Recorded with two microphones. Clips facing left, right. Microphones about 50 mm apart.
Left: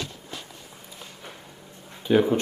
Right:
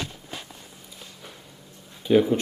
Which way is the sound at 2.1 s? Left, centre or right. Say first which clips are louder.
Right 1 dB; centre.